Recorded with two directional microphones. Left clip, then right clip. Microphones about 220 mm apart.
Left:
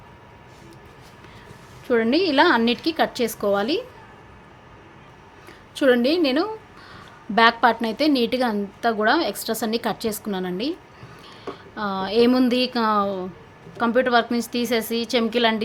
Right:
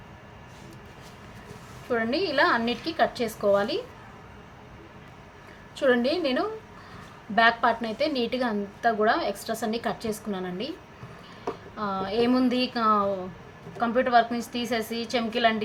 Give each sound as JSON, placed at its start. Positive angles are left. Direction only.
{"t": 1.9, "sound": "a woman's voice", "side_deg": 45}
{"t": 5.7, "sound": "a woman's voice", "side_deg": 50}
{"t": 11.8, "sound": "a woman's voice", "side_deg": 50}